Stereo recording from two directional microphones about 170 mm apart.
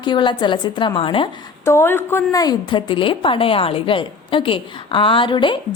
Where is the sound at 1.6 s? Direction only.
15° left (ahead or behind).